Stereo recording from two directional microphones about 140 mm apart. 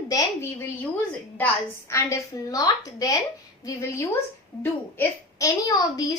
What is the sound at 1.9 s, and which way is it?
A woman's voice, 20° left (ahead or behind).